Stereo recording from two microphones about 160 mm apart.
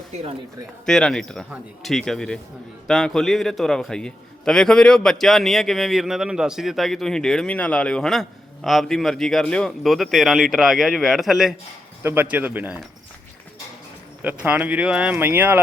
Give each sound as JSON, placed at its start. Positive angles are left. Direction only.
{"t": 0.1, "sound": "a man's voice", "side_deg": -40}
{"t": 0.9, "sound": "a man's voice", "side_deg": 5}
{"t": 12.0, "sound": "speech", "side_deg": -10}
{"t": 14.2, "sound": "speech", "side_deg": -10}